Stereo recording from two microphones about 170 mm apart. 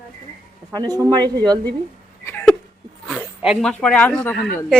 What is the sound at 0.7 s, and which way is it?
Speech, 25° right (ahead or behind).